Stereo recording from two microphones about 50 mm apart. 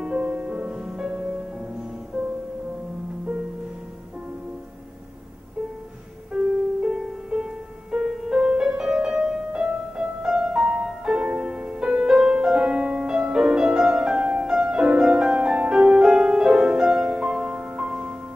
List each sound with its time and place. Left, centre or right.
0.0 s music: right
6.3 s music: centre